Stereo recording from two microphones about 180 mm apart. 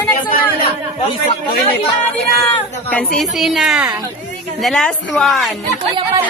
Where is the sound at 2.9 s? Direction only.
5° left (ahead or behind).